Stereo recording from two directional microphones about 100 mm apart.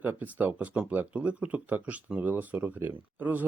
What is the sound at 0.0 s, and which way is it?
Speech, 15° right (ahead or behind).